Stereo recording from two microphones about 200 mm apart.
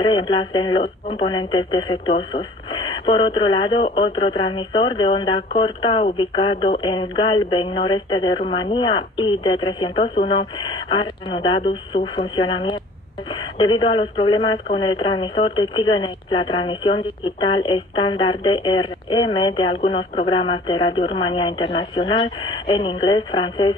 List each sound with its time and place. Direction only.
0.0 s speech: 25° left (ahead or behind)